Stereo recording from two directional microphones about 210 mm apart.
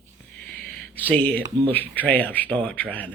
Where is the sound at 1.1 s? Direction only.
5° left (ahead or behind).